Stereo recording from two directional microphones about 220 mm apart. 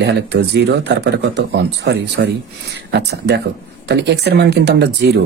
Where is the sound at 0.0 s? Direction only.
50° right (ahead or behind).